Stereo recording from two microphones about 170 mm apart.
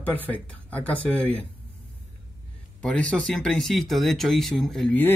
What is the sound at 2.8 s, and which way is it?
Speech, 5° left (ahead or behind).